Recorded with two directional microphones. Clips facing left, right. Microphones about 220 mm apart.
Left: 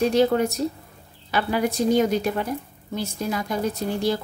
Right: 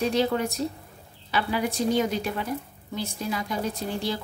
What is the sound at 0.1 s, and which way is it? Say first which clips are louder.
A woman's voice: left 5 dB; 45° left (ahead or behind).